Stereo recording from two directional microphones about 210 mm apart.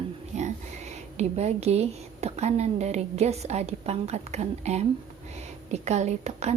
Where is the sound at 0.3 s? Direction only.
35° right (ahead or behind).